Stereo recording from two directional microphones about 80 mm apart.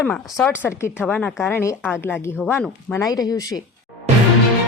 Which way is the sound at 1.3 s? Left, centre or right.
Left.